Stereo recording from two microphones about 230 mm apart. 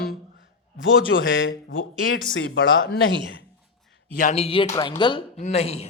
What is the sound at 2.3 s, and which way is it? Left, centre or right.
Speech, left.